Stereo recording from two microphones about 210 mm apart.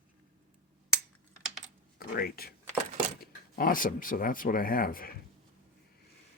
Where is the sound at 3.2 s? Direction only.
40° left (ahead or behind).